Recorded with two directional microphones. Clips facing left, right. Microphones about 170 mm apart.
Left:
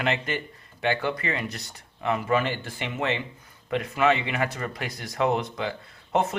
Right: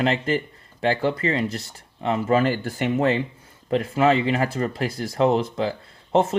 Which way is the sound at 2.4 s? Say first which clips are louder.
Right 8 dB; 40° right (ahead or behind).